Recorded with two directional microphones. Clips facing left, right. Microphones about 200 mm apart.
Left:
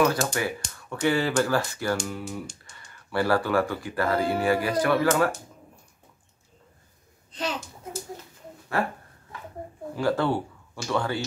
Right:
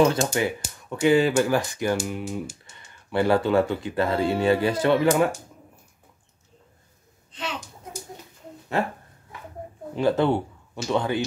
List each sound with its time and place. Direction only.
0.0 s speech: 25° right (ahead or behind)
9.9 s speech: 20° right (ahead or behind)